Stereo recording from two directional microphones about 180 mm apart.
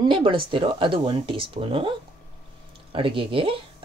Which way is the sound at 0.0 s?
30° right (ahead or behind).